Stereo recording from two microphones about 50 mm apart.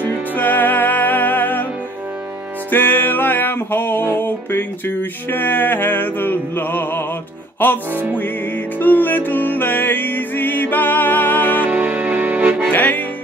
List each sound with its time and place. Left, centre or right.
0.4 s music: left
2.7 s music: left
7.9 s music: right
8.7 s music: left
11.6 s music: right
12.7 s music: left